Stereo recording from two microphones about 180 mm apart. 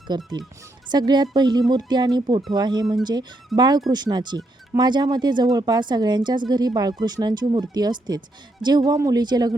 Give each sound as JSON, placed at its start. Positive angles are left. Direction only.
{"t": 0.1, "sound": "speech", "side_deg": -25}